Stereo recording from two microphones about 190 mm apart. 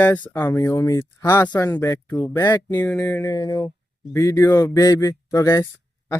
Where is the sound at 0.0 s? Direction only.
10° left (ahead or behind).